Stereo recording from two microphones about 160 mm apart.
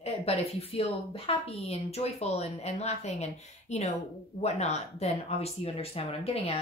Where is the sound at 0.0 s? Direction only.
40° left (ahead or behind).